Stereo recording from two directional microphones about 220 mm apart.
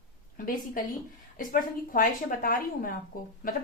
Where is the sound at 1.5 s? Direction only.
40° left (ahead or behind).